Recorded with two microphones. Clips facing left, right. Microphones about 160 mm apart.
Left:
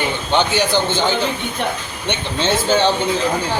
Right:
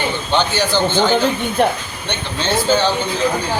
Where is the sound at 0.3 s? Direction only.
20° left (ahead or behind).